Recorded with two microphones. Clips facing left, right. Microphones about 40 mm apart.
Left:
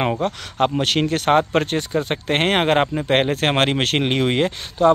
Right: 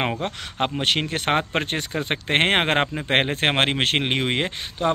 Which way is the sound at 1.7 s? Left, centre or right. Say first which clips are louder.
Left 4 dB; right.